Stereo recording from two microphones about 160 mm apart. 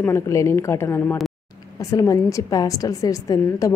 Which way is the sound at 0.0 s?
15° left (ahead or behind).